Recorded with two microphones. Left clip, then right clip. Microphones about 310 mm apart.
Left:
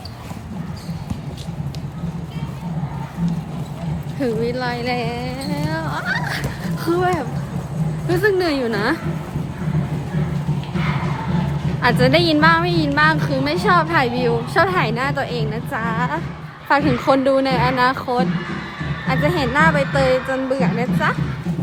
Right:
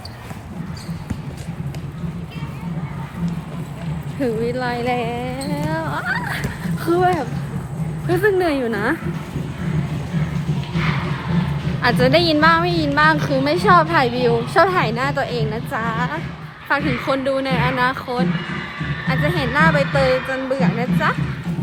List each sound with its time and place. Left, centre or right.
4.2 s a woman's voice: centre
11.8 s a woman's voice: centre